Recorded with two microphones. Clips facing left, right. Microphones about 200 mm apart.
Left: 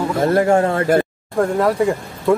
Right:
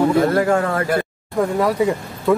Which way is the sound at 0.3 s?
25° left (ahead or behind).